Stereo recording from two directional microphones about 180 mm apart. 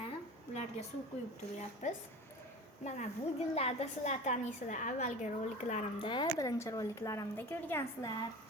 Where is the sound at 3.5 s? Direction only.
35° left (ahead or behind).